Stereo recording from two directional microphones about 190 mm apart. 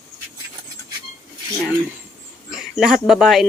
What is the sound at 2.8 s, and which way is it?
Speech, centre (ahead or behind).